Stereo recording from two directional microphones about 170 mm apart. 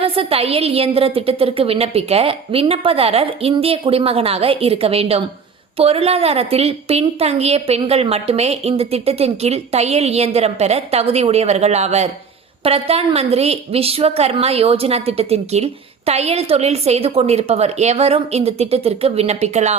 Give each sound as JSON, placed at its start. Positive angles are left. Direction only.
{"t": 0.0, "sound": "a woman's voice", "side_deg": -35}